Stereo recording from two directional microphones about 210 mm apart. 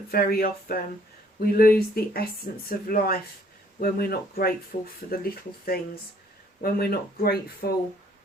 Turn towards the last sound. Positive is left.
turn(degrees=45)  # may be behind; listen again after turning